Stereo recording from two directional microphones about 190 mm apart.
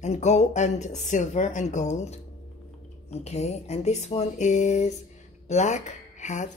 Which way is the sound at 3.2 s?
35° left (ahead or behind).